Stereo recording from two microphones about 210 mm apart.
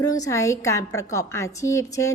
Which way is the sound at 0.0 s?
15° left (ahead or behind).